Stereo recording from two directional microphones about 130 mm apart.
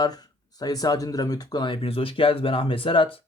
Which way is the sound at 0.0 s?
30° left (ahead or behind).